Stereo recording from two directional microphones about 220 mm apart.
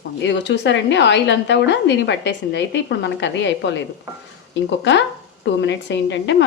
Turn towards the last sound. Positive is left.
turn(degrees=55)  # may be behind; listen again after turning